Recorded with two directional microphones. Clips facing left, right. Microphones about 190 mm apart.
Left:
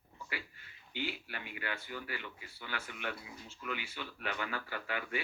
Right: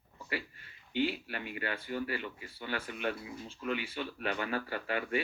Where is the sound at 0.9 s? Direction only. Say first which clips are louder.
Right 8 dB; 30° right (ahead or behind).